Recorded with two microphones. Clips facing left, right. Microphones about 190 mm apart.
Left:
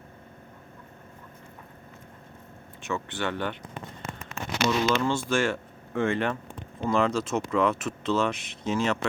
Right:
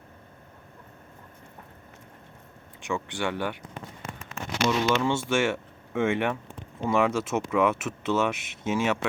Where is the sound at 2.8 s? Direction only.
15° right (ahead or behind).